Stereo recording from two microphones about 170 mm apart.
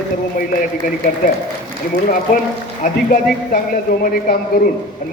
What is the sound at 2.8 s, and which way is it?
A man's voice, 55° left (ahead or behind).